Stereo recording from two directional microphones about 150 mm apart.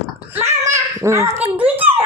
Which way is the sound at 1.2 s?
45° right (ahead or behind).